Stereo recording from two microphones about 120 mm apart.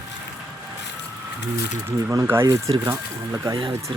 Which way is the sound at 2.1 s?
20° right (ahead or behind).